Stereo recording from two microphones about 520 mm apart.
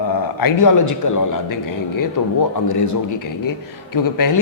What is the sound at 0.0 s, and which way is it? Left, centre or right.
A man's voice, left.